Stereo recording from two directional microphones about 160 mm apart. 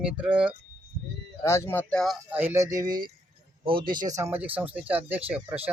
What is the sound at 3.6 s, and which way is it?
Speech, 30° right (ahead or behind).